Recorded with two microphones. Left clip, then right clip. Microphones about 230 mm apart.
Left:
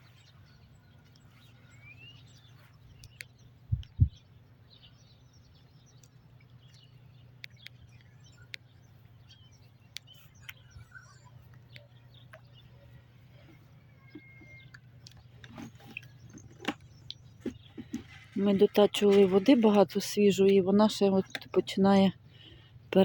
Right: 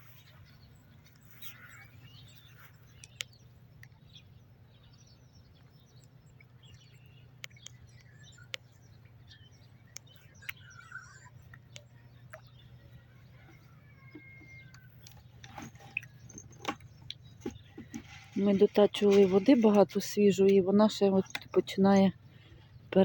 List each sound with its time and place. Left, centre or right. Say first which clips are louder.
15.4 s water: right 1 dB; left
16.2 s a sound: left 1 dB; left
18.3 s speech: left 1 dB; centre